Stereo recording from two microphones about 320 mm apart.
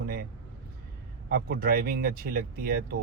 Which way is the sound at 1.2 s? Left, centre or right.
Right.